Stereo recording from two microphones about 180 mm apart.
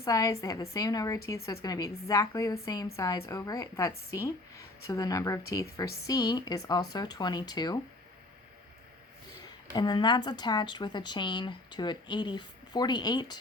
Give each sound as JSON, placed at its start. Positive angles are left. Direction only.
{"t": 0.0, "sound": "speech", "side_deg": 20}
{"t": 9.7, "sound": "speech", "side_deg": 25}